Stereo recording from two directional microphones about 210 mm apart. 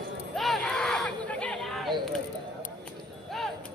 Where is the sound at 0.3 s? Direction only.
Centre (ahead or behind).